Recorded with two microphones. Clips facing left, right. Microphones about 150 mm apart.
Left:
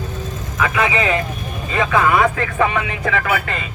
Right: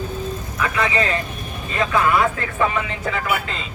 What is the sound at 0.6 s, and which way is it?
Speech, 90° left.